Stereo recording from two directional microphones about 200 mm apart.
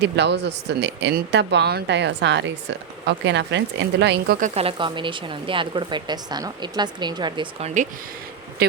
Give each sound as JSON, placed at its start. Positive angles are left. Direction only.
{"t": 0.0, "sound": "speech", "side_deg": -60}
{"t": 4.4, "sound": "a woman's voice", "side_deg": -35}